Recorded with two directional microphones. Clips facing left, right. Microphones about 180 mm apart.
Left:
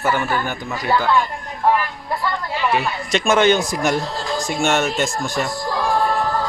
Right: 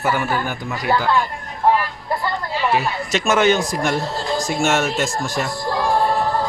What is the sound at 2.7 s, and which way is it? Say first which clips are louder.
Speech: even; 5° right (ahead or behind).